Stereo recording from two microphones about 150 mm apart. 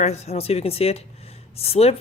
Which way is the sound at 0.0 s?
45° left (ahead or behind).